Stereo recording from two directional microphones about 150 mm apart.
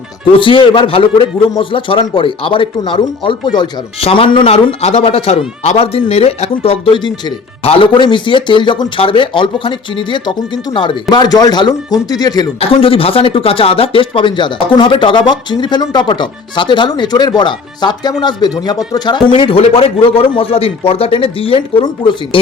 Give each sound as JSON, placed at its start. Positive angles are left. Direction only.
{"t": 0.3, "sound": "a man's voice", "side_deg": 35}
{"t": 12.5, "sound": "a man's voice", "side_deg": 40}